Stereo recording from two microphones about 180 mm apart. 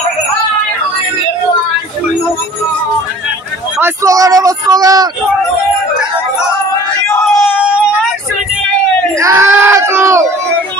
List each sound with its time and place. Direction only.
3.7 s speech: 15° right (ahead or behind)
7.1 s crowd: 10° left (ahead or behind)
9.1 s crowd: 15° right (ahead or behind)